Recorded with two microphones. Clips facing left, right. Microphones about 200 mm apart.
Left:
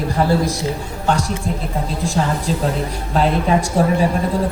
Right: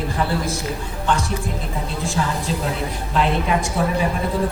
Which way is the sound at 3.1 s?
35° left (ahead or behind).